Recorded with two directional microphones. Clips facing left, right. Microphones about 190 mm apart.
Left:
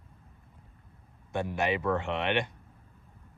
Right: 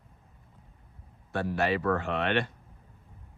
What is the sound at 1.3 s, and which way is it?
Speech, 15° left (ahead or behind).